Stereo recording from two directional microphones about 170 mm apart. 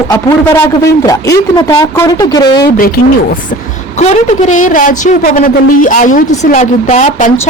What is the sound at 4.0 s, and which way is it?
A woman's voice, 45° left (ahead or behind).